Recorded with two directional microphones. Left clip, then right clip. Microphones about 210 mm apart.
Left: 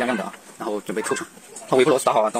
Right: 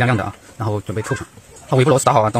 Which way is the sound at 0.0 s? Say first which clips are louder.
Right 5 dB; 30° right (ahead or behind).